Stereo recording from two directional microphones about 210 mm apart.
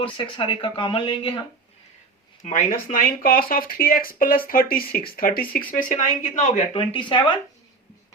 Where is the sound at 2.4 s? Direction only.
40° left (ahead or behind); by 7.4 s 20° left (ahead or behind).